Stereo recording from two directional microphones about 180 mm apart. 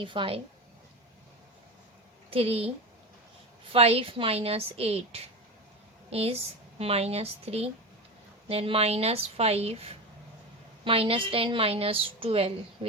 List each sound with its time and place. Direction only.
0.0 s a woman's voice: 30° right (ahead or behind)
2.3 s a woman's voice: 35° right (ahead or behind)